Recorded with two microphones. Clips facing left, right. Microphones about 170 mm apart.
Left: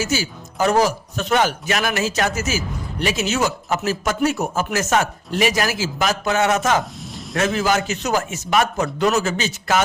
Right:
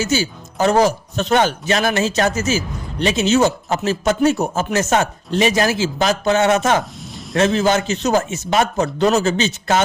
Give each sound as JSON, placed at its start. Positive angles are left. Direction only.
{"t": 0.0, "sound": "speech", "side_deg": -30}